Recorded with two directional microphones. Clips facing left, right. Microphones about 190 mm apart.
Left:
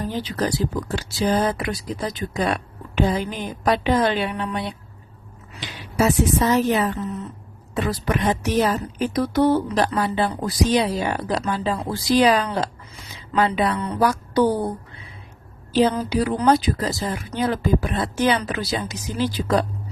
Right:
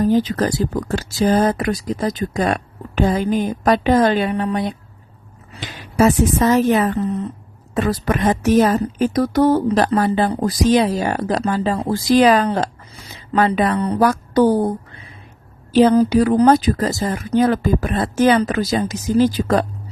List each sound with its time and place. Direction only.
0.0 s a woman's voice: 45° right (ahead or behind)
15.8 s a woman's voice: 50° right (ahead or behind)